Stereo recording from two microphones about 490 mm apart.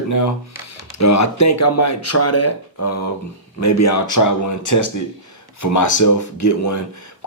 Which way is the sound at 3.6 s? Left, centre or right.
Left.